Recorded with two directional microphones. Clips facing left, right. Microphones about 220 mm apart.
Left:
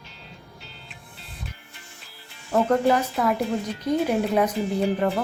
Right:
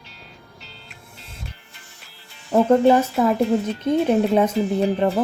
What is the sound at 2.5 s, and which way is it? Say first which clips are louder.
A woman's voice: right 5 dB; 25° right (ahead or behind).